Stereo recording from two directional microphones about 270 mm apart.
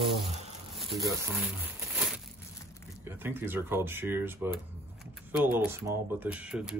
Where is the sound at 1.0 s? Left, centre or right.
Centre.